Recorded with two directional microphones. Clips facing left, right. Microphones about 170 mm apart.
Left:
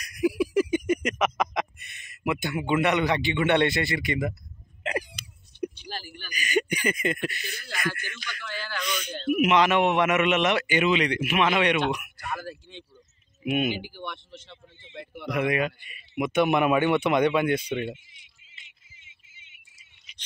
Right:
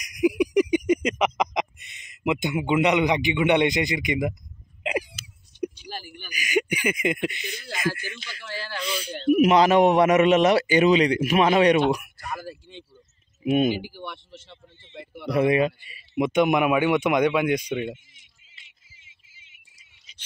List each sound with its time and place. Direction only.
0.0 s a sound: 15° right (ahead or behind)
4.8 s a man's voice: 10° right (ahead or behind); by 11.8 s 35° right (ahead or behind)
12.4 s speech: 5° right (ahead or behind)
13.5 s a man's voice: 35° right (ahead or behind)
13.8 s speech: 5° right (ahead or behind)
15.2 s a man's voice: 30° right (ahead or behind)
16.3 s speech: 15° right (ahead or behind)